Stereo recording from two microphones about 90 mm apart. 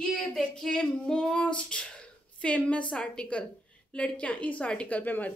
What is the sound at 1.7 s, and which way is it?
A woman's voice, 10° left (ahead or behind).